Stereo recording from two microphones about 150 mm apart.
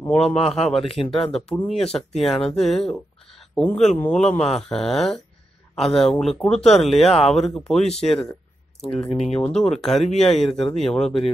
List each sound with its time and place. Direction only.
0.2 s speech: 45° left (ahead or behind)
0.5 s speech: 5° left (ahead or behind)
0.9 s speech: 40° left (ahead or behind)
1.3 s speech: 5° left (ahead or behind)
9.2 s speech: 45° left (ahead or behind)
9.5 s speech: 5° left (ahead or behind)